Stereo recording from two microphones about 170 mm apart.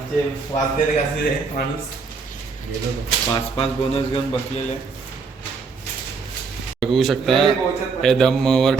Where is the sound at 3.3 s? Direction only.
35° left (ahead or behind).